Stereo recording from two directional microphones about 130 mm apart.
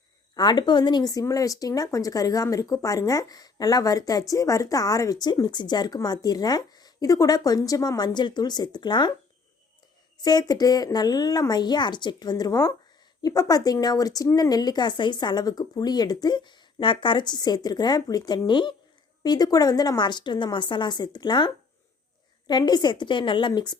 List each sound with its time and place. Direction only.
0.3 s speech: 35° left (ahead or behind)
10.2 s speech: 30° left (ahead or behind)